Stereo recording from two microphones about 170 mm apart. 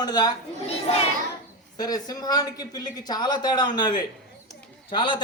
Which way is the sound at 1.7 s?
25° left (ahead or behind).